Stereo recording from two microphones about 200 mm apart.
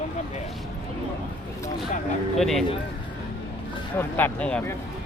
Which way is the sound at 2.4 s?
Centre (ahead or behind).